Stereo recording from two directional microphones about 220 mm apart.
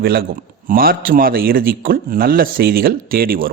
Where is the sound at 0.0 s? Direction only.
45° right (ahead or behind).